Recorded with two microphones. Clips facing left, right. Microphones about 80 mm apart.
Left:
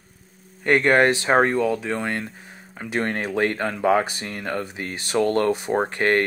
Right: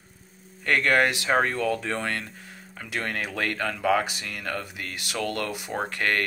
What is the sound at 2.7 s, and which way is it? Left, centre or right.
Speech, left.